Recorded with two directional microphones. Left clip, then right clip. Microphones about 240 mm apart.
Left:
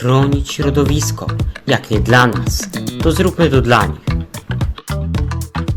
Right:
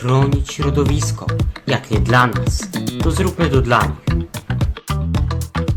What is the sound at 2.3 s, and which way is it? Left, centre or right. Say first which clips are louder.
Speech: left 3 dB; centre.